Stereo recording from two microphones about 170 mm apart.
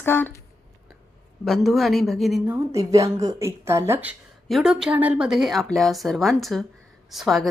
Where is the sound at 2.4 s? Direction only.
15° right (ahead or behind).